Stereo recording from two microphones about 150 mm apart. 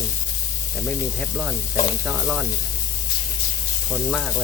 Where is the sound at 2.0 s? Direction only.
Centre (ahead or behind).